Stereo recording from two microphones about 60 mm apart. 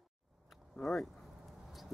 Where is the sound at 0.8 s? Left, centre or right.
Centre.